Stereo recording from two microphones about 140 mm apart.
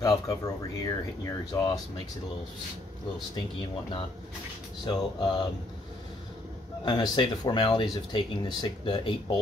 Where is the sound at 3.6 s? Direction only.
35° left (ahead or behind).